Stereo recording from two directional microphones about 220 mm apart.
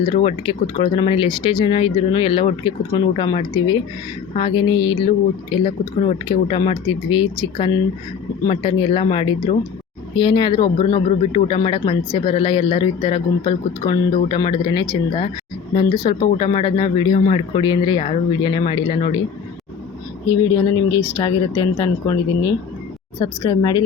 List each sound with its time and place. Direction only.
0.0 s speech: 25° left (ahead or behind)
8.4 s speech: 25° left (ahead or behind)
20.2 s speech: 15° left (ahead or behind)
23.2 s speech: 15° left (ahead or behind)